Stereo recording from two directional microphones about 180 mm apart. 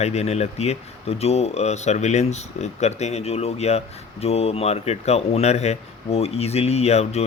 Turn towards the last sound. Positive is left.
turn(degrees=35)  # may be behind; listen again after turning